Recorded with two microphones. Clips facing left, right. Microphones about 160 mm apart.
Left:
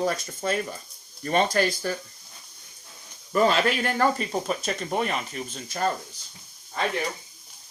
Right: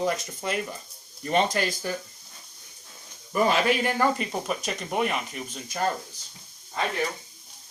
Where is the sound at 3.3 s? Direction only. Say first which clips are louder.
Left 1 dB; 15° right (ahead or behind).